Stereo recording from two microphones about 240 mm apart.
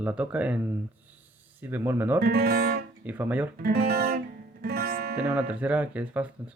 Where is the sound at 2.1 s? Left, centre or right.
Right.